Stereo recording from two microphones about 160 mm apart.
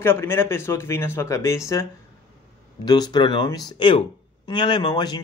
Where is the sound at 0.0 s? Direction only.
15° left (ahead or behind).